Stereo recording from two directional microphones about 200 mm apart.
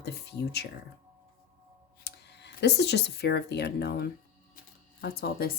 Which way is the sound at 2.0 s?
55° left (ahead or behind).